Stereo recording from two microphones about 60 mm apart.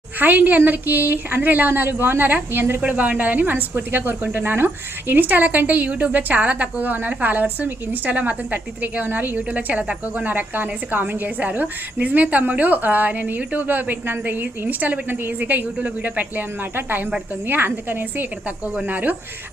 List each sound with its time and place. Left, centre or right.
0.2 s a woman's voice: right
2.8 s a woman's voice: right